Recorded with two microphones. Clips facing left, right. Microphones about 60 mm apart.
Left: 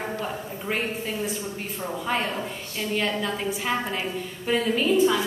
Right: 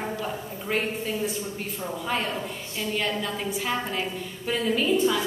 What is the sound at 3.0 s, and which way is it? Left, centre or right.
A woman's voice, centre.